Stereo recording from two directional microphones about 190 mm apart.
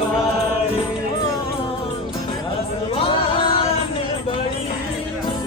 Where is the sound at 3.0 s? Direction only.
30° left (ahead or behind).